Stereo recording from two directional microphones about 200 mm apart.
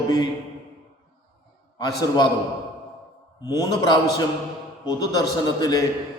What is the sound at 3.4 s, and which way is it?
Speech, 20° left (ahead or behind).